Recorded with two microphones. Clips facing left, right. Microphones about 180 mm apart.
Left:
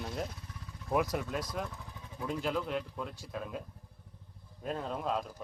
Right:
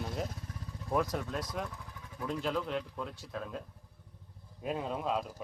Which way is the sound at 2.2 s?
5° left (ahead or behind).